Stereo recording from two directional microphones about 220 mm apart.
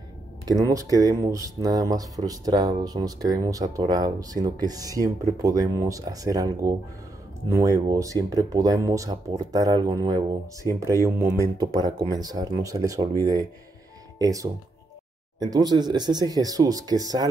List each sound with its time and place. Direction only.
0.5 s speech: 15° right (ahead or behind)